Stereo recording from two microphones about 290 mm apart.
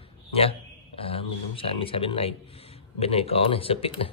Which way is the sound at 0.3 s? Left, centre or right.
Centre.